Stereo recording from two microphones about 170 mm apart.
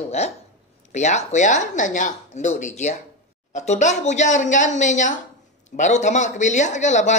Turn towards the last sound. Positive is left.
turn(degrees=45)  # may be behind; listen again after turning